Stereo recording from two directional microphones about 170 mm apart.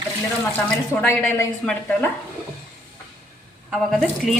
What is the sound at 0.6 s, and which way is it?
Speech, 10° left (ahead or behind).